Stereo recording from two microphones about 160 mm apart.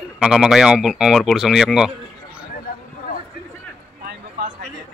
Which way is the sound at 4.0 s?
70° right (ahead or behind).